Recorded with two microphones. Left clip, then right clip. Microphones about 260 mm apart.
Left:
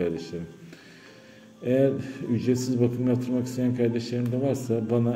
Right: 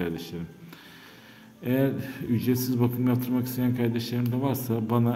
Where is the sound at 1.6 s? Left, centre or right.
Centre.